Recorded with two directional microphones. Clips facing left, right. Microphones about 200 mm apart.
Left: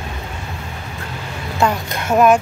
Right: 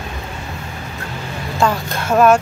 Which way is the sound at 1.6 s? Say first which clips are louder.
Even; 20° left (ahead or behind).